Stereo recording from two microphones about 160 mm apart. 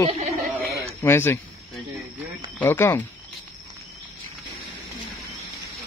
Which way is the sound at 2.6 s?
15° left (ahead or behind).